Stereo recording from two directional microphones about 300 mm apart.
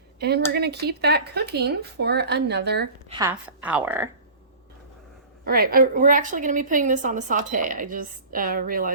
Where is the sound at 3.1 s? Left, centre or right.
Centre.